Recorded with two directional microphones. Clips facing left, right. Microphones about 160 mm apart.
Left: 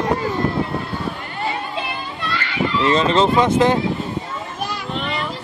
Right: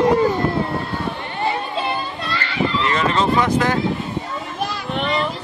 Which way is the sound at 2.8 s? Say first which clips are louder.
Left 6 dB; 20° left (ahead or behind).